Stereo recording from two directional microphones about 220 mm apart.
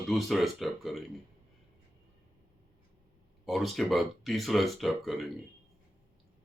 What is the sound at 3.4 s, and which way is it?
Speech, centre (ahead or behind).